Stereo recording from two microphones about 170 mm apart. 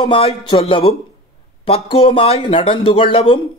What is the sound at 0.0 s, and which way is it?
A man's voice, 35° left (ahead or behind).